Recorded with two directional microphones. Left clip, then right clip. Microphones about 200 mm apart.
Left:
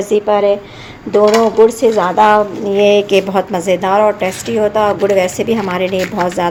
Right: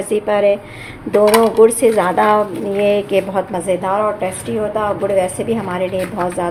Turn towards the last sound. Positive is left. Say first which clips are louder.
# left 4 dB
turn(degrees=30)  # may be behind; listen again after turning